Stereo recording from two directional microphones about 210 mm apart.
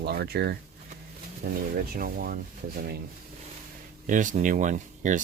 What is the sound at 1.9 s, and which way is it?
Speech, 45° right (ahead or behind).